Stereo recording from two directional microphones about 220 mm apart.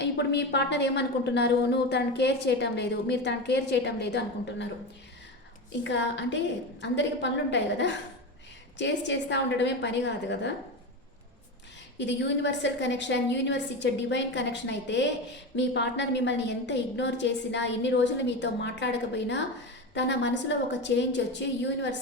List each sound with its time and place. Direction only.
0.0 s a woman's voice: 50° left (ahead or behind)
5.8 s a woman's voice: 55° left (ahead or behind)
11.9 s a woman's voice: 55° left (ahead or behind)